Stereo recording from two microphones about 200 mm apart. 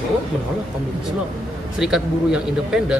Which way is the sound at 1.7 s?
5° right (ahead or behind).